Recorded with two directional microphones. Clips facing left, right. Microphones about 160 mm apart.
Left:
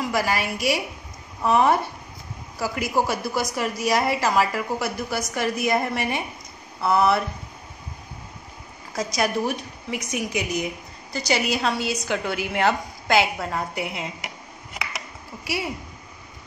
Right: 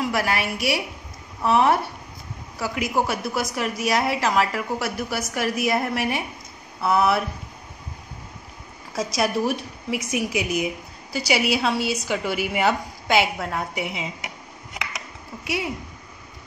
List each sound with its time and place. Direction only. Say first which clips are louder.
0.0 s a woman's voice: even; centre (ahead or behind)
8.9 s a woman's voice: right 1 dB; centre (ahead or behind)
15.4 s speech: right 1 dB; centre (ahead or behind)